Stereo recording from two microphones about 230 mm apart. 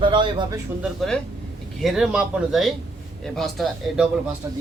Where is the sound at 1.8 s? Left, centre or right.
Centre.